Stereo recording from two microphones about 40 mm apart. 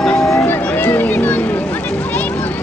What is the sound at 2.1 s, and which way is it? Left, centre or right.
Music, left.